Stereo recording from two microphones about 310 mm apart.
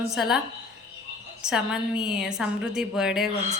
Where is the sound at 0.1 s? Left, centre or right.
Centre.